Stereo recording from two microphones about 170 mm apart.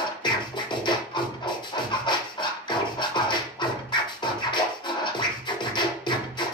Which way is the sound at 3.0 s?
25° left (ahead or behind).